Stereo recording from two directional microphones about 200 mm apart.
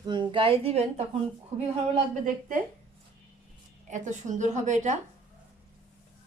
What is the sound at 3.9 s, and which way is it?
A woman's voice, 35° right (ahead or behind).